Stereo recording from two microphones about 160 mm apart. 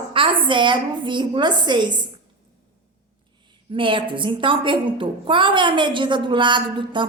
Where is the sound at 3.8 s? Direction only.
30° right (ahead or behind).